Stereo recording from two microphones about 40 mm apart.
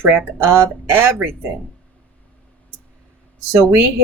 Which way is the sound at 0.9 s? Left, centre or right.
Right.